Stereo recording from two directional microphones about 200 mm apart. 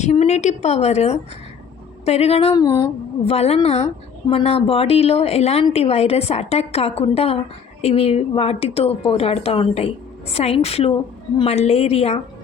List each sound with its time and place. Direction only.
0.0 s a woman's voice: 35° left (ahead or behind)